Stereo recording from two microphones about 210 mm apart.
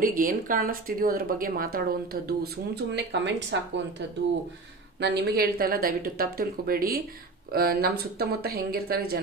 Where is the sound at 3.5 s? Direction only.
55° right (ahead or behind).